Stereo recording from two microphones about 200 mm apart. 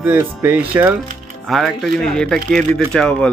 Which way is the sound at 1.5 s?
Centre (ahead or behind).